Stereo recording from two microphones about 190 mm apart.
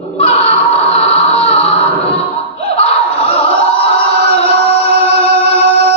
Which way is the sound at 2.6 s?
30° left (ahead or behind).